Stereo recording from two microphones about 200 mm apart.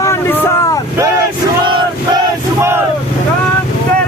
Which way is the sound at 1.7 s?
25° right (ahead or behind).